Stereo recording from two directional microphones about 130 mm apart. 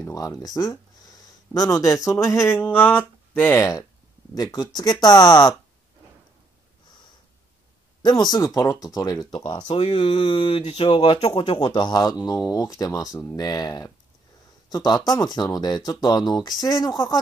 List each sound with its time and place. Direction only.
0.0 s speech: 25° left (ahead or behind)
8.0 s speech: 35° left (ahead or behind)
9.7 s speech: 55° left (ahead or behind)
9.9 s speech: 40° left (ahead or behind)